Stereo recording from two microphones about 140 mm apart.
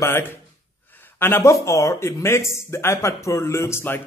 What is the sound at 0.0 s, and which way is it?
Speech, 20° left (ahead or behind).